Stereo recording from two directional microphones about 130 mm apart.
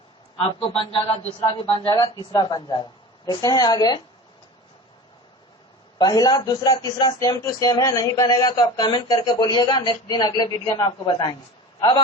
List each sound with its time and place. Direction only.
0.7 s a man's voice: 50° left (ahead or behind)
1.9 s a man's voice: 30° left (ahead or behind)
6.0 s a man's voice: 30° left (ahead or behind)